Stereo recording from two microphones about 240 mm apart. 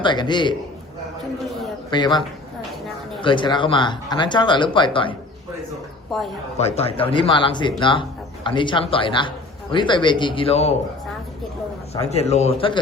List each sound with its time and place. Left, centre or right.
0.0 s speech: centre
1.9 s speech: centre
6.1 s speech: centre
6.6 s speech: left
12.0 s speech: left